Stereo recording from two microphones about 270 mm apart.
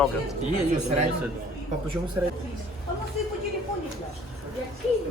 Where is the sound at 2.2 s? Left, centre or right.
Centre.